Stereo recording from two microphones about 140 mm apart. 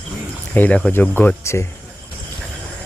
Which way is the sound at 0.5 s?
10° left (ahead or behind).